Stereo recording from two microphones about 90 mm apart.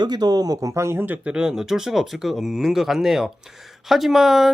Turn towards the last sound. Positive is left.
turn(degrees=-5)  # may be behind; listen again after turning